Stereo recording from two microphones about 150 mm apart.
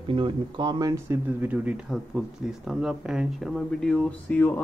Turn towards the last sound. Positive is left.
turn(degrees=10)  # may be behind; listen again after turning